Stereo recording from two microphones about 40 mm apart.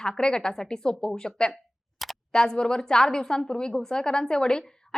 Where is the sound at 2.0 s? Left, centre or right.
Centre.